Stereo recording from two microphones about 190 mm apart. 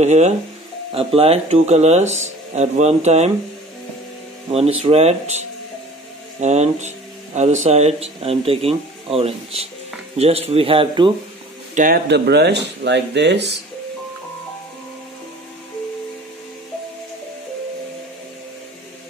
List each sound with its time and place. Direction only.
0.0 s speech: 35° right (ahead or behind)
4.5 s speech: 30° right (ahead or behind)
11.7 s speech: 45° right (ahead or behind)
12.1 s speech: 60° right (ahead or behind)